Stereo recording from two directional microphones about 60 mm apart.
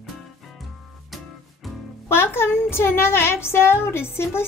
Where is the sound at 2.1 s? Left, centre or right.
Left.